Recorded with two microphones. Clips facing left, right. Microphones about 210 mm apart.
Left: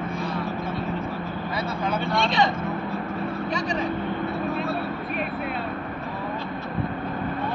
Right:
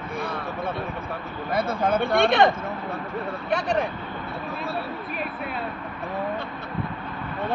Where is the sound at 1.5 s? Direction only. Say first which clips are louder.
Right 5 dB; 50° right (ahead or behind).